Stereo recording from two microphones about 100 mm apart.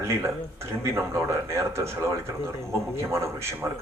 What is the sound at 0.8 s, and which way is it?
Speech, 30° right (ahead or behind).